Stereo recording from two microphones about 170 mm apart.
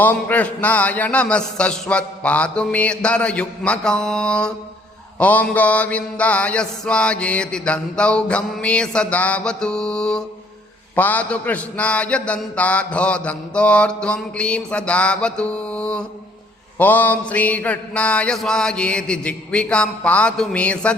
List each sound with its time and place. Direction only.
0.0 s a man's voice: 10° left (ahead or behind)